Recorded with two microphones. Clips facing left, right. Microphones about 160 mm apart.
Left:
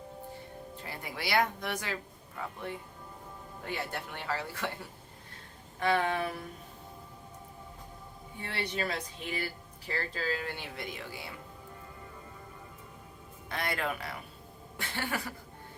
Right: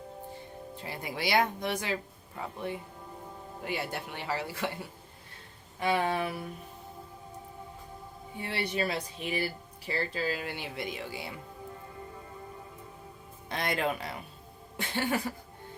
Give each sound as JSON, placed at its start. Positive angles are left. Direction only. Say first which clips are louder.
{"t": 0.9, "sound": "speech", "louder": "right 4 dB", "side_deg": -20}
{"t": 5.8, "sound": "speech", "louder": "right 1 dB", "side_deg": -15}
{"t": 8.4, "sound": "speech", "louder": "right 3 dB", "side_deg": -10}
{"t": 13.5, "sound": "speech", "louder": "right 3 dB", "side_deg": -20}